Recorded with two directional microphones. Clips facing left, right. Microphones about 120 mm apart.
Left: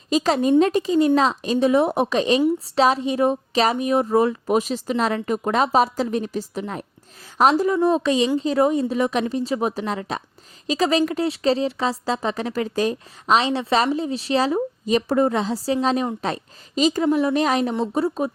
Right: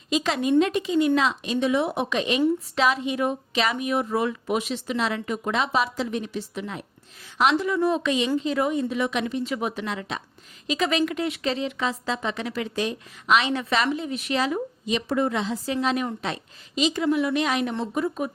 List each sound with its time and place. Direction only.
0.1 s speech: 40° left (ahead or behind)